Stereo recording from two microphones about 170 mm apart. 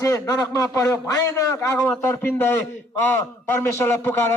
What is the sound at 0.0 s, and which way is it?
A man's voice, 20° left (ahead or behind).